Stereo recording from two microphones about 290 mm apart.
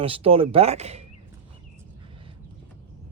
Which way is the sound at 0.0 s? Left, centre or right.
Centre.